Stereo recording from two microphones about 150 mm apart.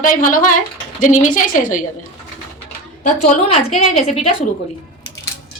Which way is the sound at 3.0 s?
50° left (ahead or behind).